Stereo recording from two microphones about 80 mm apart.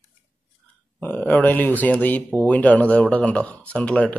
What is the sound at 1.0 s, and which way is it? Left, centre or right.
Speech, left.